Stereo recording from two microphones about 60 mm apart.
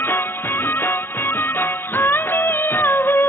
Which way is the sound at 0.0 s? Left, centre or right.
Left.